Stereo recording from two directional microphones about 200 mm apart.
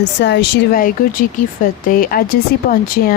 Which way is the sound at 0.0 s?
60° left (ahead or behind).